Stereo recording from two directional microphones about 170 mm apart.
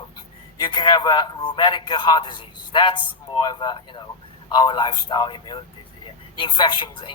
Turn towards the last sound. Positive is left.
turn(degrees=30)  # may be behind; listen again after turning